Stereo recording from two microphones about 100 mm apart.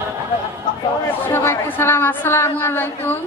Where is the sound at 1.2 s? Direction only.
25° left (ahead or behind).